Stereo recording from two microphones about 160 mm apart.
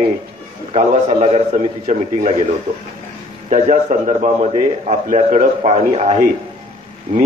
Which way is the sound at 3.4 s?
50° right (ahead or behind).